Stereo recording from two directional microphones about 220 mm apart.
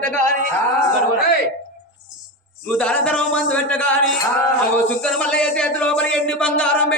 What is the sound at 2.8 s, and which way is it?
Speech, 5° left (ahead or behind).